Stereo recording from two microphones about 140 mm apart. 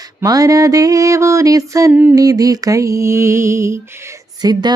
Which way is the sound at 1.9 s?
10° right (ahead or behind).